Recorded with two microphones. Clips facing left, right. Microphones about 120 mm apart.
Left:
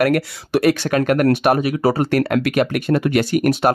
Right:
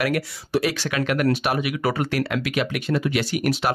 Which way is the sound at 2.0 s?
50° left (ahead or behind).